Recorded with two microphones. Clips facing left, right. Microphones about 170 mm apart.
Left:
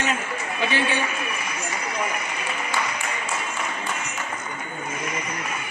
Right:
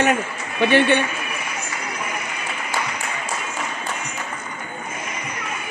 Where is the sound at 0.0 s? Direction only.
60° right (ahead or behind).